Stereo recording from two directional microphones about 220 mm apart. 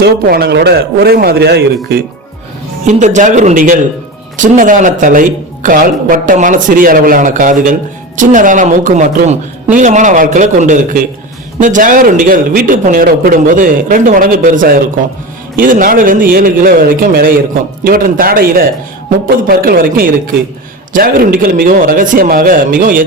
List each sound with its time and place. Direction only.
0.0 s a man's voice: 45° right (ahead or behind)
2.8 s a man's voice: 35° right (ahead or behind)